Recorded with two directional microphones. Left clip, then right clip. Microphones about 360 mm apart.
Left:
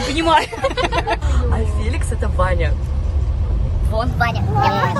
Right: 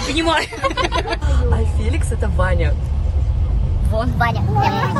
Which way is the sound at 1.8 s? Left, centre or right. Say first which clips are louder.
Right 1 dB; centre.